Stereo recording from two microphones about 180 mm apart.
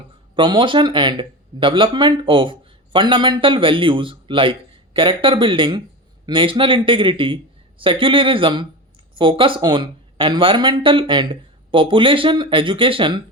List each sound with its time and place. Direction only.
0.3 s speech: 25° right (ahead or behind)